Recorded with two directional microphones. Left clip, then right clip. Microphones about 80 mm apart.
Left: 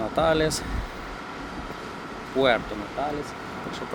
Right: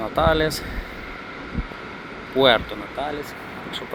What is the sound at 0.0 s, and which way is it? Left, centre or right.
Speech, left.